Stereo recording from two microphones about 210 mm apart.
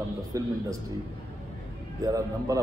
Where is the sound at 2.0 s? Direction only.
15° right (ahead or behind).